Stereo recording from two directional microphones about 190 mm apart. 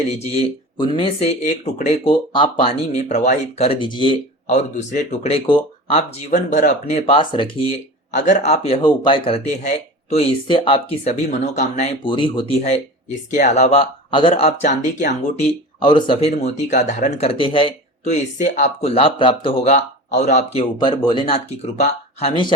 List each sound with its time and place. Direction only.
0.8 s speech: 30° left (ahead or behind)
4.4 s speech: 35° left (ahead or behind)
7.0 s speech: 25° left (ahead or behind)
8.1 s speech: 40° left (ahead or behind)
20.7 s speech: 20° left (ahead or behind)